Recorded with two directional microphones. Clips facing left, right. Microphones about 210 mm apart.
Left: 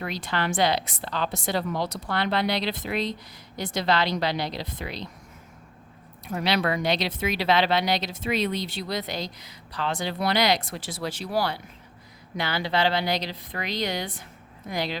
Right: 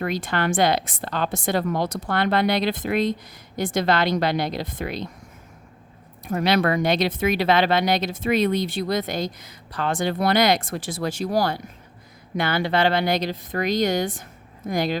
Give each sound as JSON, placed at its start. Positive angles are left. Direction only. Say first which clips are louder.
{"t": 0.0, "sound": "speech", "louder": "right 5 dB", "side_deg": -50}
{"t": 6.2, "sound": "speech", "louder": "right 5 dB", "side_deg": -50}